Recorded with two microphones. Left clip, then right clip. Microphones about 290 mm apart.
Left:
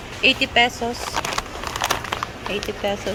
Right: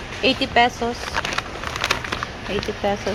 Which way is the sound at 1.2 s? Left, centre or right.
Left.